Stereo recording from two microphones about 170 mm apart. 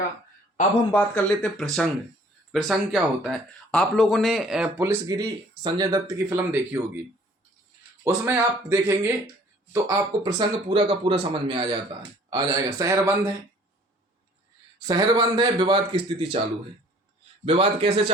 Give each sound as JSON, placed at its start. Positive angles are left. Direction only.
{"t": 0.9, "sound": "speech", "side_deg": 5}
{"t": 4.8, "sound": "speech", "side_deg": -20}
{"t": 6.5, "sound": "speech", "side_deg": -10}
{"t": 8.0, "sound": "speech", "side_deg": -15}
{"t": 14.8, "sound": "speech", "side_deg": -25}
{"t": 17.4, "sound": "a man's voice", "side_deg": -35}